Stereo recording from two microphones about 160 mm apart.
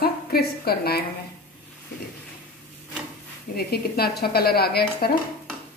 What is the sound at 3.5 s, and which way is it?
A woman's voice, 75° left (ahead or behind).